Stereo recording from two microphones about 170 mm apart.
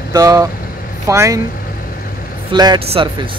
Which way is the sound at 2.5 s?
25° right (ahead or behind).